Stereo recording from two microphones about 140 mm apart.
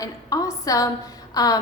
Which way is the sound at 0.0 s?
25° left (ahead or behind).